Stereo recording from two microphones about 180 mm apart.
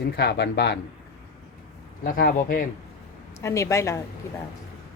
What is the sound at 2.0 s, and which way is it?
Speech, 50° left (ahead or behind).